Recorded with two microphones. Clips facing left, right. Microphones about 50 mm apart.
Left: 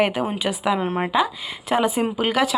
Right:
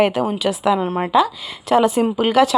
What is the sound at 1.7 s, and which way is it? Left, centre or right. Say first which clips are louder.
Speech: right 5 dB; centre.